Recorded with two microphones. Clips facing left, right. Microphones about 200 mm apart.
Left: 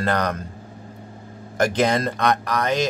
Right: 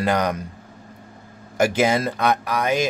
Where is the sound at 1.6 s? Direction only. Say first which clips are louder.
Right 1 dB; 5° right (ahead or behind).